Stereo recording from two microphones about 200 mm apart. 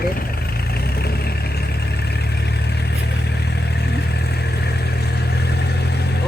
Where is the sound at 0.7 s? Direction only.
50° left (ahead or behind).